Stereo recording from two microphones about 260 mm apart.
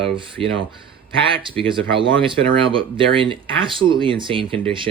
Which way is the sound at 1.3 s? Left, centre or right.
Centre.